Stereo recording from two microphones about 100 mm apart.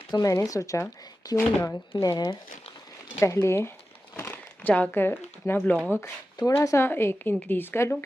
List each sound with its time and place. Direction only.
0.1 s speech: 35° left (ahead or behind)
3.2 s speech: 30° left (ahead or behind)
4.2 s speech: 15° left (ahead or behind)
5.9 s speech: 30° left (ahead or behind)